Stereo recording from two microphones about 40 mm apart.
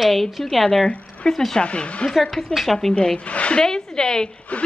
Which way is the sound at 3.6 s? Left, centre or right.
Centre.